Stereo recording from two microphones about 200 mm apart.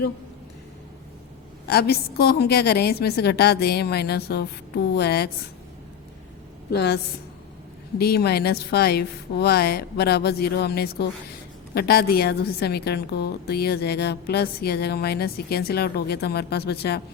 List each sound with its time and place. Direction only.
1.6 s a woman's voice: 55° left (ahead or behind)
6.7 s a woman's voice: 55° left (ahead or behind)